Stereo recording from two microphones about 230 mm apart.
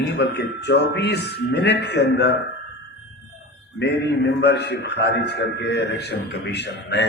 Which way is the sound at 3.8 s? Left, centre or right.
Left.